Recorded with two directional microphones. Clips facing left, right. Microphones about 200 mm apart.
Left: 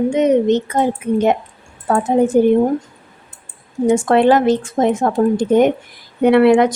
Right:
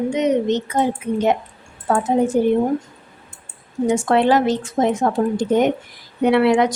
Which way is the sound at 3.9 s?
55° left (ahead or behind).